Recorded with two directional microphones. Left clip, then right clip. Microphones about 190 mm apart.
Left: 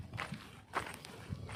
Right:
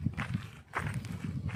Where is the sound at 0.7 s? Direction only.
10° right (ahead or behind).